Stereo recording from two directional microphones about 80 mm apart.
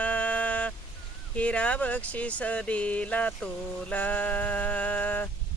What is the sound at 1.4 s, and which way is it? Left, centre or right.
Speech, centre.